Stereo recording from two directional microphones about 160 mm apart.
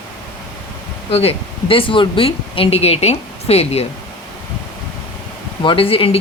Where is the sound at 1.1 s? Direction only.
40° left (ahead or behind).